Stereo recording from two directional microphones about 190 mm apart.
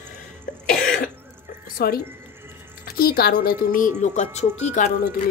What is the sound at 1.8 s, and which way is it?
A woman's voice, 50° left (ahead or behind).